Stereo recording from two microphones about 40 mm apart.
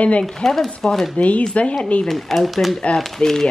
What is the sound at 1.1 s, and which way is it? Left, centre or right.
Speech, left.